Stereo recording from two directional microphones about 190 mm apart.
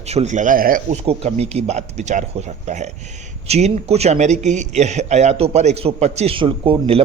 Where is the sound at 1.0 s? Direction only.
30° right (ahead or behind).